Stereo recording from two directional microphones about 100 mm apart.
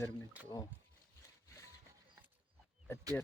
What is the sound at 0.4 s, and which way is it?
Speech, 15° right (ahead or behind).